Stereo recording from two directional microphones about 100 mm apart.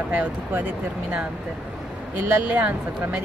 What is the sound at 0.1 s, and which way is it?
Speech, 20° right (ahead or behind).